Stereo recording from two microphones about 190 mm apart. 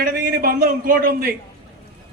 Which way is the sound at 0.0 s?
50° right (ahead or behind).